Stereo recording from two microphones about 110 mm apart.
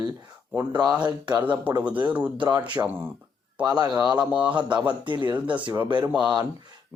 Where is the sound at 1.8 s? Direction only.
15° right (ahead or behind).